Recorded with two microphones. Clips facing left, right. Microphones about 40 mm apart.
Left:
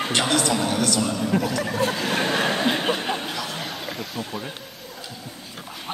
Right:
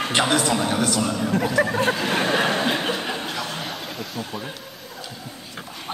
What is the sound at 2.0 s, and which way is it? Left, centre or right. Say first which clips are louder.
Speech: right 2 dB; centre.